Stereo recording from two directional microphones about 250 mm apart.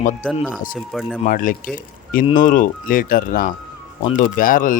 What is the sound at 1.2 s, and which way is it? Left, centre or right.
Speech, left.